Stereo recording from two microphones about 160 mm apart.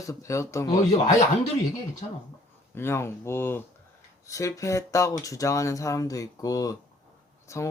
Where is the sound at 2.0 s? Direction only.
45° left (ahead or behind).